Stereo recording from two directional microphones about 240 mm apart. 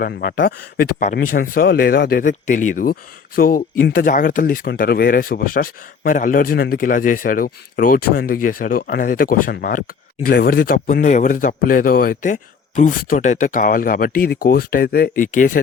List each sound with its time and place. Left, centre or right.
0.0 s speech: left